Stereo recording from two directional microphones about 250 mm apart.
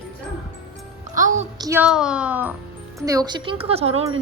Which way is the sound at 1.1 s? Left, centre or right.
Right.